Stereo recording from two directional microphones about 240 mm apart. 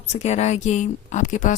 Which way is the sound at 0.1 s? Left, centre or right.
Left.